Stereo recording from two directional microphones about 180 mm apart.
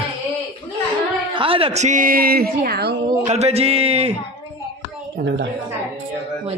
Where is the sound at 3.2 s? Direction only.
35° right (ahead or behind).